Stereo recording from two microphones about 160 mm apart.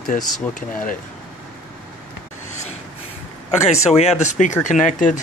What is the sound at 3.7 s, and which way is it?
Speech, 40° left (ahead or behind).